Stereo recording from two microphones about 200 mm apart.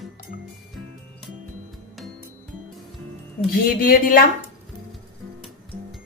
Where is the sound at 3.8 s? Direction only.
45° left (ahead or behind).